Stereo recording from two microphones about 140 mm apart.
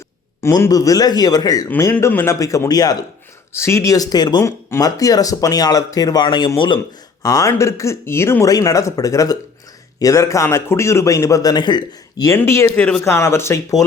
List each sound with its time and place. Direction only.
0.4 s speech: 20° left (ahead or behind)
1.6 s speech: 15° left (ahead or behind)